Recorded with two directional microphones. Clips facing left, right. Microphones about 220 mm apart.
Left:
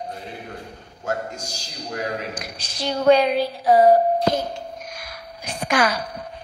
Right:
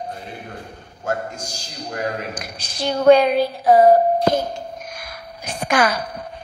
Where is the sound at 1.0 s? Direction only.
50° right (ahead or behind).